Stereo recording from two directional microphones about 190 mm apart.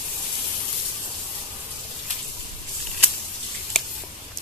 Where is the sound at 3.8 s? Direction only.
Centre (ahead or behind).